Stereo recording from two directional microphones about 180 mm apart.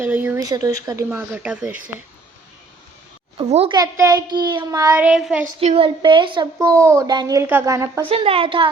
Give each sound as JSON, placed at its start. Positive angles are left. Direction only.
{"t": 0.0, "sound": "speech", "side_deg": -10}
{"t": 0.3, "sound": "speech", "side_deg": -20}
{"t": 3.3, "sound": "a woman's voice", "side_deg": -30}
{"t": 3.8, "sound": "a woman's voice", "side_deg": -20}
{"t": 4.9, "sound": "speech", "side_deg": -5}
{"t": 5.5, "sound": "a woman's voice", "side_deg": -30}
{"t": 8.0, "sound": "a woman's voice", "side_deg": -30}